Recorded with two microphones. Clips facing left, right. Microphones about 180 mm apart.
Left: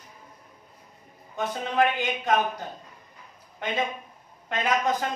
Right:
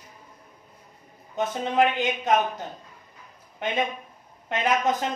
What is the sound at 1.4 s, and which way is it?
Speech, 20° right (ahead or behind).